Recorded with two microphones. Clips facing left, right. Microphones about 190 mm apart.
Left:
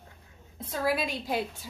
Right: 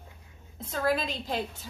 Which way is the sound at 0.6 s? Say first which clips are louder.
Right 1 dB; 10° left (ahead or behind).